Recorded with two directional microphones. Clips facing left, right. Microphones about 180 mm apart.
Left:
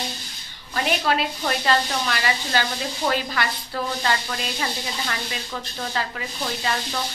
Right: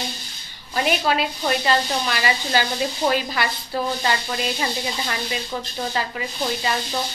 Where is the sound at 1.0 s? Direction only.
10° right (ahead or behind).